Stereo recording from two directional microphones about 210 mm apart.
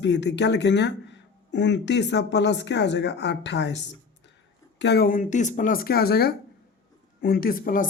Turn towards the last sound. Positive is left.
turn(degrees=40)  # may be behind; listen again after turning